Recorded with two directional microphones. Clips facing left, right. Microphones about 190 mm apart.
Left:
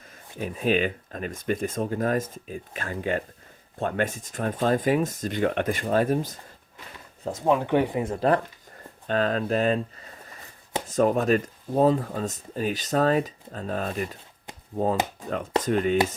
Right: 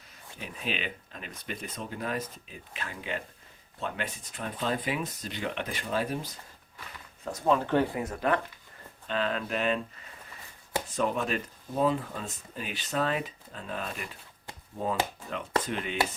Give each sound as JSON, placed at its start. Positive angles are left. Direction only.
{"t": 0.3, "sound": "speech", "side_deg": 45}
{"t": 7.3, "sound": "speech", "side_deg": 20}
{"t": 9.0, "sound": "speech", "side_deg": 45}
{"t": 15.2, "sound": "speech", "side_deg": 40}